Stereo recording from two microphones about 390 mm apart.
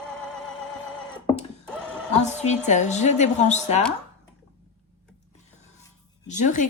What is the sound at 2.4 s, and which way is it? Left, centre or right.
A woman's voice, centre.